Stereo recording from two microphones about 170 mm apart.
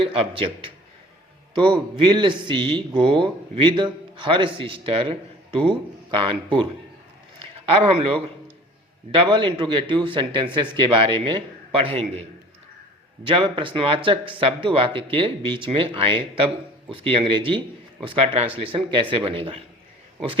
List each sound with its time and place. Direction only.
0.0 s a man's voice: 30° right (ahead or behind)
13.2 s speech: 30° right (ahead or behind)